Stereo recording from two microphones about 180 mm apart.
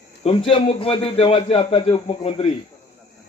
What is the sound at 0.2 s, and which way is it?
A man's voice, 30° left (ahead or behind).